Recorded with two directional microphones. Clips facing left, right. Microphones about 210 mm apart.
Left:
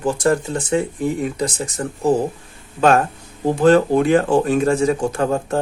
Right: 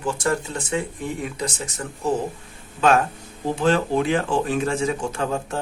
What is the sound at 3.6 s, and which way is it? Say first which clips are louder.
Speech: left 7 dB; 45° left (ahead or behind).